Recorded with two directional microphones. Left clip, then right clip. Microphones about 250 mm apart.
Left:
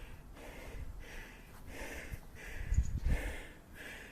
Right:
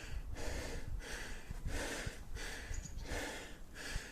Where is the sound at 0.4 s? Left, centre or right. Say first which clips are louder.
Right 5 dB; right.